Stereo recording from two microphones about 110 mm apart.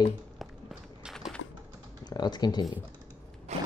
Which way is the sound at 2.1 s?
40° left (ahead or behind).